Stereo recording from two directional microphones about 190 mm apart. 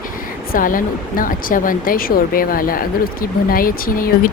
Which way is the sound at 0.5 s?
45° left (ahead or behind).